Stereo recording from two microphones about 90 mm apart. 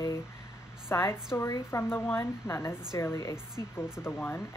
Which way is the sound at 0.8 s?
30° left (ahead or behind).